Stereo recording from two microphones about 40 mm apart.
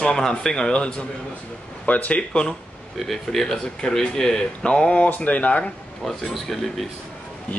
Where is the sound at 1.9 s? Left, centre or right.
Left.